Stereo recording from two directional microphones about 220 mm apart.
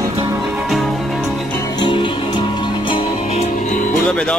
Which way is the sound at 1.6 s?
20° left (ahead or behind).